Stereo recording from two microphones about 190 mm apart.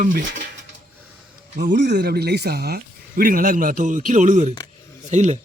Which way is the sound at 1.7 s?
60° right (ahead or behind).